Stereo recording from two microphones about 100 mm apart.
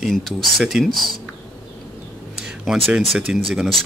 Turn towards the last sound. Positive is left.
turn(degrees=0)  # may be behind; listen again after turning